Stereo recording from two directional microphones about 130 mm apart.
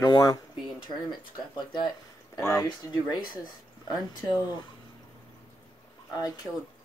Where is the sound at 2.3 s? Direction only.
25° left (ahead or behind).